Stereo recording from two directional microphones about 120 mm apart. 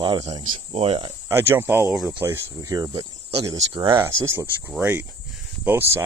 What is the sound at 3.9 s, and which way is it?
Speech, 20° right (ahead or behind).